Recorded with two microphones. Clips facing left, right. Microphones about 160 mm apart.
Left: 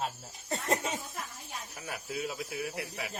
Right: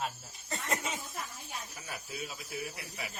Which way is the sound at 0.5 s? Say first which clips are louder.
Left 4 dB; 40° left (ahead or behind).